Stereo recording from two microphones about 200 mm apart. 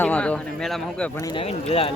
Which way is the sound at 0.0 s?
5° left (ahead or behind).